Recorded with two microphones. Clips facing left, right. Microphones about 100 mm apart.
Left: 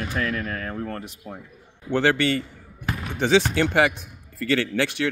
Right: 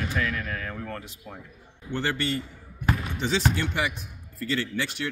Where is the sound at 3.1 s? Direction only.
65° left (ahead or behind).